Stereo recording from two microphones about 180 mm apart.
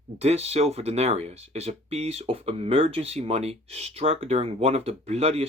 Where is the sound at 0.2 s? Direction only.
35° right (ahead or behind).